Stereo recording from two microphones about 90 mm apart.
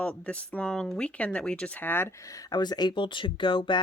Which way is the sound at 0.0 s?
15° left (ahead or behind).